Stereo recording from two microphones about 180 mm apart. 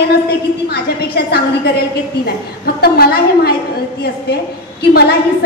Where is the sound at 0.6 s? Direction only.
60° left (ahead or behind).